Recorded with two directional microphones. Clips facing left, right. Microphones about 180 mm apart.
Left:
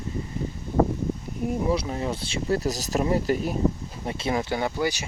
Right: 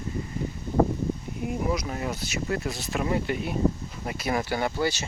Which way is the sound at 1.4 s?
30° left (ahead or behind).